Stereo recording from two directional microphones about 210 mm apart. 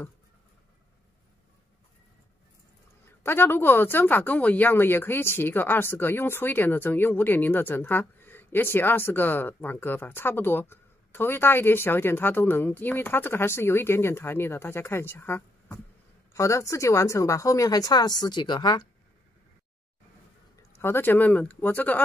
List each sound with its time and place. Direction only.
3.3 s speech: 10° left (ahead or behind)
20.7 s speech: 10° left (ahead or behind)